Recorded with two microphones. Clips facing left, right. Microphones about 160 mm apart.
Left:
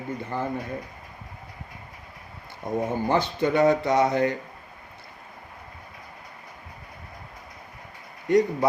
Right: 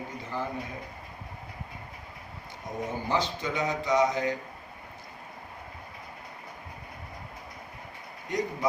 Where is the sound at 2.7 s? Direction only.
55° left (ahead or behind).